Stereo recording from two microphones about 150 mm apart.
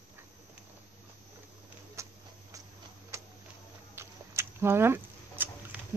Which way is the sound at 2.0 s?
20° right (ahead or behind).